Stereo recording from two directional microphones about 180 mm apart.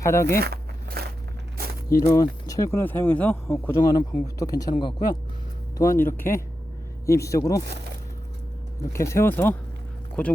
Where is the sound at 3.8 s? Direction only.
25° left (ahead or behind).